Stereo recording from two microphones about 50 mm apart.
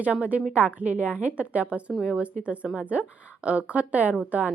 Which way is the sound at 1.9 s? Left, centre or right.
Centre.